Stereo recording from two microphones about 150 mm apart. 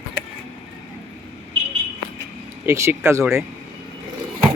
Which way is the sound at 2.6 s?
20° right (ahead or behind).